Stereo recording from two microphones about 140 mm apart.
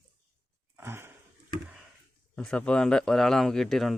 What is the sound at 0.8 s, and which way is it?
Dog, 15° right (ahead or behind).